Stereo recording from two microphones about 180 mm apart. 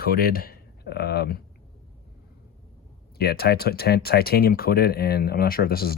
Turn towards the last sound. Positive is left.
turn(degrees=55)  # may be behind; listen again after turning